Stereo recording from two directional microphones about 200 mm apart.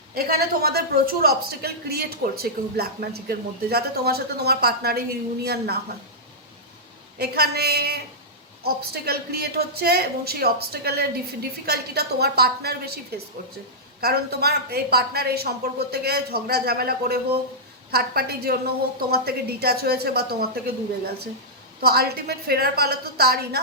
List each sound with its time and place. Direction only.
0.1 s speech: 50° right (ahead or behind)
7.2 s speech: 50° right (ahead or behind)
14.0 s speech: 50° right (ahead or behind)
21.8 s speech: 50° right (ahead or behind)